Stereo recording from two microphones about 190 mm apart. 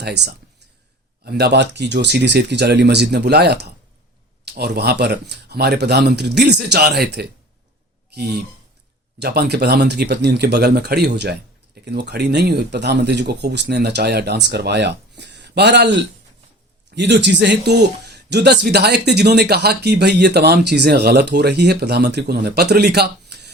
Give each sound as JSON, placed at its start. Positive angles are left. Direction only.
{"t": 1.2, "sound": "speech", "side_deg": -55}